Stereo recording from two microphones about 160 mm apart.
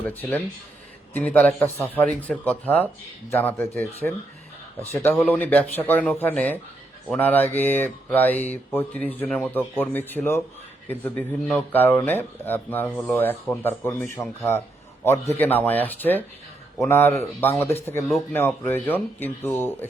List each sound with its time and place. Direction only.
0.1 s speech: 10° left (ahead or behind)